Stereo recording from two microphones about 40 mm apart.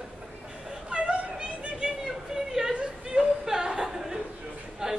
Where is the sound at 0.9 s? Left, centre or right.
Right.